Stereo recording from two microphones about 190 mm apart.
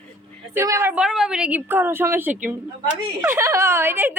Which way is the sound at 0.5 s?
15° right (ahead or behind).